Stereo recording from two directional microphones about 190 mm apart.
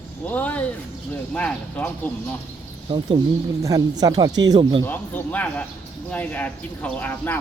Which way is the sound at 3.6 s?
20° right (ahead or behind).